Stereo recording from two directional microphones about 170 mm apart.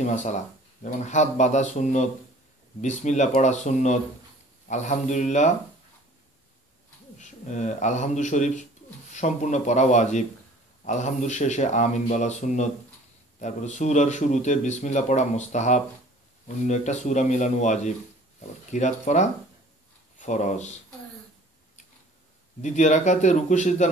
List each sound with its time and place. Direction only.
0.0 s speech: 45° left (ahead or behind)
7.2 s a man's voice: 45° left (ahead or behind)
22.6 s speech: 45° left (ahead or behind)